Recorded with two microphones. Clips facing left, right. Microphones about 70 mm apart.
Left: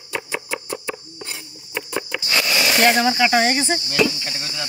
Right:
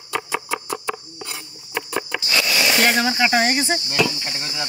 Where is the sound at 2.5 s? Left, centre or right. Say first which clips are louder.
Even; left.